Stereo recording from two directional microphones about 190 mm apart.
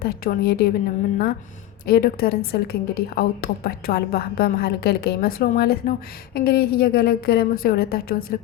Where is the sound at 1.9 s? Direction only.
55° left (ahead or behind).